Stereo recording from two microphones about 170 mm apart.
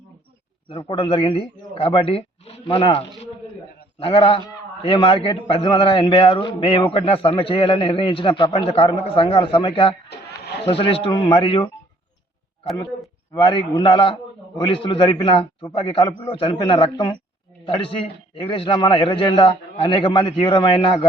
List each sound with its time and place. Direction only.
0.7 s a man's voice: 30° left (ahead or behind)
10.1 s a sound: 75° left (ahead or behind)
10.7 s a man's voice: 30° left (ahead or behind)
13.3 s a man's voice: 25° left (ahead or behind)